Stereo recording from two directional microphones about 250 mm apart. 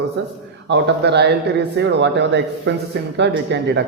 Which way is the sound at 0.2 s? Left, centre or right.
Right.